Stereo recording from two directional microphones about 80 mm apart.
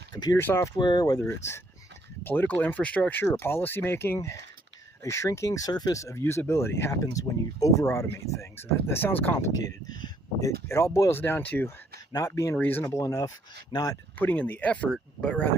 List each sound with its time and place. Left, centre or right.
0.1 s speech: left
0.3 s speech: left
0.8 s speech: left
2.2 s speech: left
3.2 s speech: left
6.0 s speech: left
10.4 s speech: left
11.1 s speech: left
12.1 s speech: left
12.5 s speech: left
13.0 s speech: left
14.2 s speech: left